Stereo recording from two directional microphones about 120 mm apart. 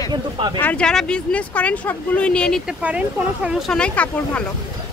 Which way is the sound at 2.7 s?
10° right (ahead or behind).